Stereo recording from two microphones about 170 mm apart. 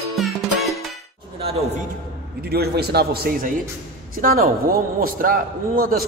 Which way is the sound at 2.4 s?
65° right (ahead or behind).